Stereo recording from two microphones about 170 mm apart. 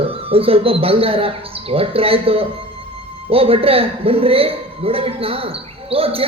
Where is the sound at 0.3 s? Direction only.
35° right (ahead or behind).